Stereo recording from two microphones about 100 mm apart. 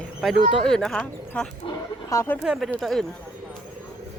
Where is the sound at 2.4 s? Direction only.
5° right (ahead or behind).